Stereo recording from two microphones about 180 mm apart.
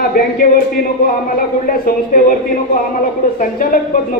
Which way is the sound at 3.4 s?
50° left (ahead or behind).